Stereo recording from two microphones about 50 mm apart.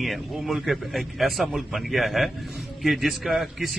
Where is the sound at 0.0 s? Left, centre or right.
Centre.